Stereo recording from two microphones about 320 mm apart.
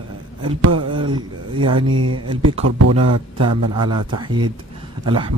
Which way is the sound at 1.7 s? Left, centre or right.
Right.